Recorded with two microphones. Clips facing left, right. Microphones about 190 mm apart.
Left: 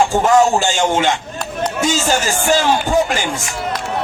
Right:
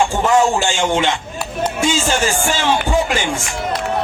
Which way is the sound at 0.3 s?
40° left (ahead or behind).